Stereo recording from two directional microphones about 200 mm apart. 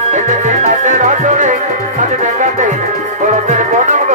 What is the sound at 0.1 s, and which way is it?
Music, 35° right (ahead or behind).